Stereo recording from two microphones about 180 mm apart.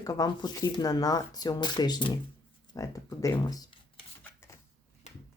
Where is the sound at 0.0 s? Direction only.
20° left (ahead or behind).